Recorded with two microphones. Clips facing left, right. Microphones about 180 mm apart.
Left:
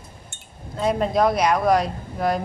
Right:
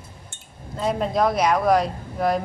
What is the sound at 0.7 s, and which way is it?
Speech, centre (ahead or behind).